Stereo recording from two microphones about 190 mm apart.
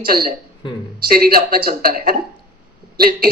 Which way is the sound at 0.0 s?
50° right (ahead or behind).